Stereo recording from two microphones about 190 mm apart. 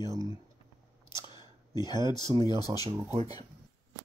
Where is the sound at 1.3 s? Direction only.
20° left (ahead or behind).